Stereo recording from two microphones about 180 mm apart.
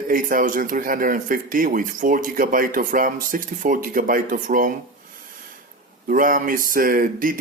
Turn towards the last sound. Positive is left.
turn(degrees=-50)  # may be behind; listen again after turning